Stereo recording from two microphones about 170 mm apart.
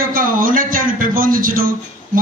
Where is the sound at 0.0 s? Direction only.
55° right (ahead or behind).